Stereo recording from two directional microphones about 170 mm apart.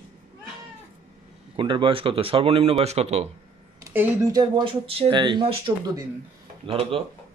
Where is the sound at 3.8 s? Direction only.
10° right (ahead or behind).